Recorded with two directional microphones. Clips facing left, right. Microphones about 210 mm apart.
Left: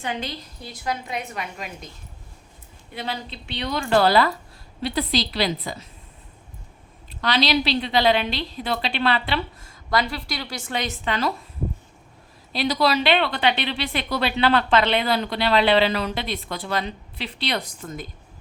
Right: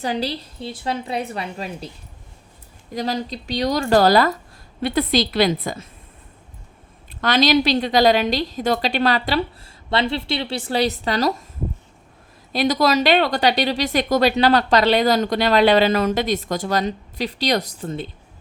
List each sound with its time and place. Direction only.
0.0 s speech: 35° right (ahead or behind)
2.9 s a woman's voice: 40° right (ahead or behind)
7.1 s speech: 50° right (ahead or behind)
12.5 s speech: 45° right (ahead or behind); by 18.1 s 30° right (ahead or behind)